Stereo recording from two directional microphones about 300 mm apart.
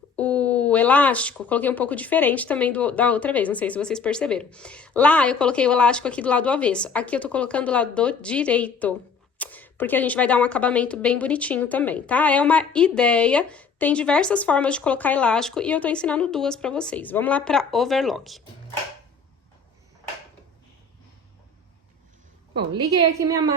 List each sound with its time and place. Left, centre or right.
0.2 s speech: centre
22.7 s a woman's voice: centre